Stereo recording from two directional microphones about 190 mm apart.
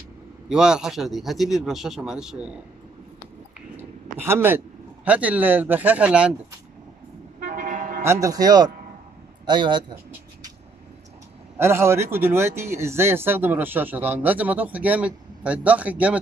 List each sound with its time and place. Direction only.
0.5 s speech: 5° right (ahead or behind)
3.7 s a man's voice: 10° right (ahead or behind)
7.3 s toot: 45° right (ahead or behind)
8.0 s speech: 15° right (ahead or behind)
11.5 s speech: 15° right (ahead or behind)